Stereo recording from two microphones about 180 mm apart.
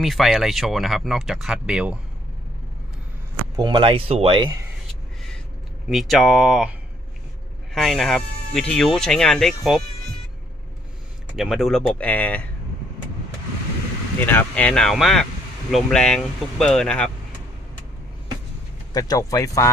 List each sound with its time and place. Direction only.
0.0 s speech: centre (ahead or behind)
3.5 s speech: 25° right (ahead or behind)
5.9 s speech: centre (ahead or behind)
11.3 s speech: centre (ahead or behind)
14.2 s speech: 10° left (ahead or behind)
18.9 s speech: 20° left (ahead or behind)